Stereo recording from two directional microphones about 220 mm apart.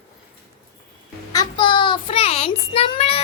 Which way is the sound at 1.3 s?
20° left (ahead or behind).